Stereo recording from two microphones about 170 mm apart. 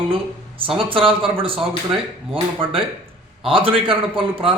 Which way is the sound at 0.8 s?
30° right (ahead or behind).